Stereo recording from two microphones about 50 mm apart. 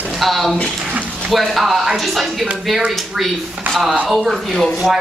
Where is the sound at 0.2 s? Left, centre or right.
Centre.